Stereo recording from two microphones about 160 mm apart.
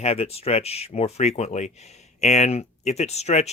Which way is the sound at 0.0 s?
40° left (ahead or behind).